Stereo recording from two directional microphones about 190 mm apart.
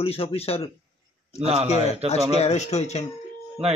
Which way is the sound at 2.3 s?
35° left (ahead or behind).